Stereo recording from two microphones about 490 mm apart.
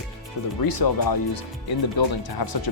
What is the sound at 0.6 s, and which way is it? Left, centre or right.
Speech, left.